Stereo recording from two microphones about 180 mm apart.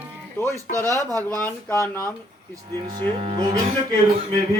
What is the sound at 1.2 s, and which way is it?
Speech, 10° left (ahead or behind).